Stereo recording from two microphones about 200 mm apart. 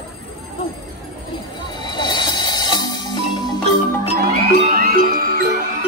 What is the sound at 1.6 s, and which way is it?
Music, 20° left (ahead or behind).